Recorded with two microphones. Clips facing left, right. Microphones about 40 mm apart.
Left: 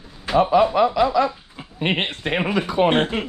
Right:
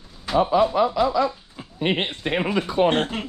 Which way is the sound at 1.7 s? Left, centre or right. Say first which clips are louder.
Left 1 dB; left.